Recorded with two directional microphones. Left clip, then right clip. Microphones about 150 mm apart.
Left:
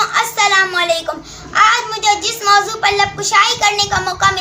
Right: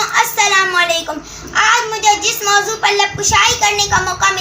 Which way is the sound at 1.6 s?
25° left (ahead or behind).